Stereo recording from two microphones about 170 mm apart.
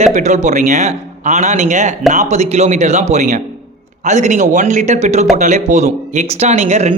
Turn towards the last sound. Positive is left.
turn(degrees=-45)  # may be behind; listen again after turning